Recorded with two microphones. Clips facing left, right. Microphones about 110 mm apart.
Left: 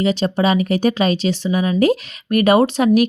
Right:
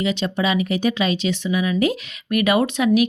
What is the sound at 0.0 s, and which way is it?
Speech, 35° left (ahead or behind).